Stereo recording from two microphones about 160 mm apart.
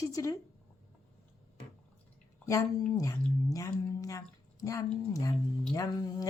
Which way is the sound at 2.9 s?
20° left (ahead or behind).